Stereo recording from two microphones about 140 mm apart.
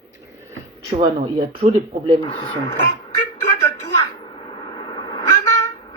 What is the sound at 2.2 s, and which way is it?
Speech, 40° left (ahead or behind).